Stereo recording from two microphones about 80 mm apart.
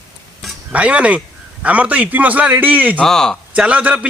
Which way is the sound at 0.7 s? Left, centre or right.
Centre.